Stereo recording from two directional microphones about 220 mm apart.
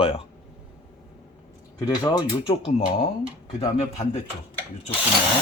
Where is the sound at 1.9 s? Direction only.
15° left (ahead or behind).